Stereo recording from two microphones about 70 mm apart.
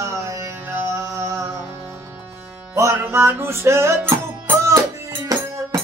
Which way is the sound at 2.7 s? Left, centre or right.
Right.